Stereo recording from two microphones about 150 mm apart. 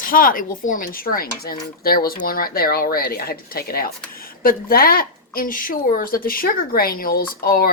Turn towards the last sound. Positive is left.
turn(degrees=80)